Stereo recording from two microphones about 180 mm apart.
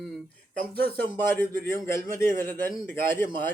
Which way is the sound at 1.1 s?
10° left (ahead or behind).